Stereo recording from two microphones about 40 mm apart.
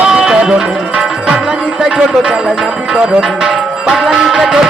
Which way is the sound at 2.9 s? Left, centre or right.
Centre.